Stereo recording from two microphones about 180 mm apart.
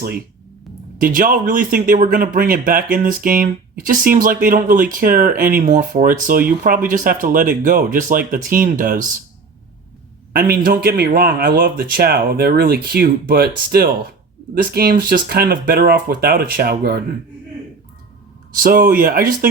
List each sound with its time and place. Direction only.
0.9 s a man's voice: 50° right (ahead or behind)
10.3 s a man's voice: 55° right (ahead or behind)
18.6 s a man's voice: 50° right (ahead or behind)